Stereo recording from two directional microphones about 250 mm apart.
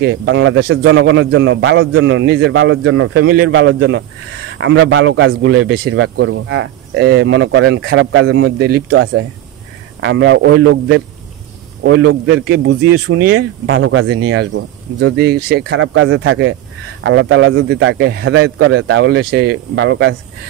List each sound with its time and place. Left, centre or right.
0.0 s speech: right
12.9 s speech: right
13.2 s speech: right
15.9 s speech: right